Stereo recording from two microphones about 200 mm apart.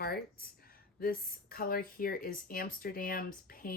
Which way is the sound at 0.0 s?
50° left (ahead or behind).